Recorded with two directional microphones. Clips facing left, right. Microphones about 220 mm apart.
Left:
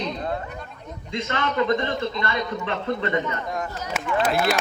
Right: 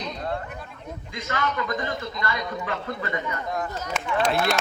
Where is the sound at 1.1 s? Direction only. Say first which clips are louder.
Left 3 dB; 25° left (ahead or behind).